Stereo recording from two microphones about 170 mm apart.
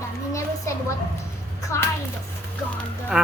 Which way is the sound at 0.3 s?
15° left (ahead or behind).